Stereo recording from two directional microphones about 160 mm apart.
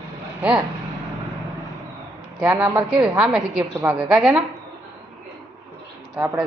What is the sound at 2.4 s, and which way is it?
Speech, 15° right (ahead or behind).